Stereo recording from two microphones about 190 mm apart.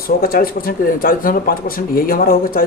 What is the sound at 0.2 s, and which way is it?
Speech, 50° left (ahead or behind).